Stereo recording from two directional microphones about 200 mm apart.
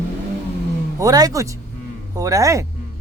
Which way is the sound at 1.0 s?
20° right (ahead or behind).